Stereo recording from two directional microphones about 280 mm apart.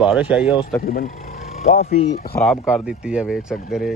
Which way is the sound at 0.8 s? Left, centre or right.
Left.